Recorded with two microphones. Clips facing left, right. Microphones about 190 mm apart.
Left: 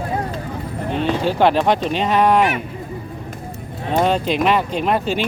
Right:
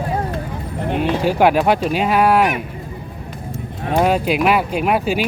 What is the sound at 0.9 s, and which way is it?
Speech, 10° right (ahead or behind).